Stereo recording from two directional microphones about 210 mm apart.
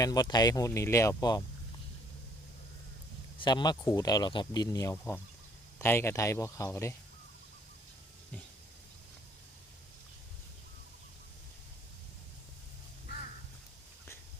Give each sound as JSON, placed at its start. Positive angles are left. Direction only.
{"t": 0.0, "sound": "speech", "side_deg": 20}
{"t": 3.3, "sound": "speech", "side_deg": 20}